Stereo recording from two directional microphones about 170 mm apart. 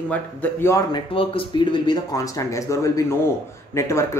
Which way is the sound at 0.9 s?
30° left (ahead or behind).